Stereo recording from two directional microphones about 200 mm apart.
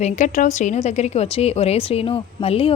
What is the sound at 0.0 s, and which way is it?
Speech, 40° left (ahead or behind).